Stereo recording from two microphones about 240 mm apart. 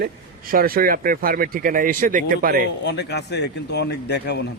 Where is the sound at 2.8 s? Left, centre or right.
Left.